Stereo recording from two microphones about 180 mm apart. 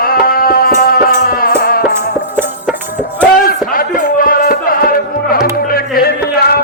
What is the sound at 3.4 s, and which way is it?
Music, 50° left (ahead or behind).